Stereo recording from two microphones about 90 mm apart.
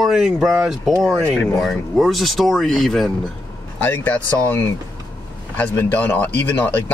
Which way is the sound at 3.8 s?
20° left (ahead or behind).